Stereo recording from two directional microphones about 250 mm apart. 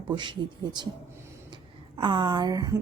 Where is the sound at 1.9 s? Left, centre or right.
Centre.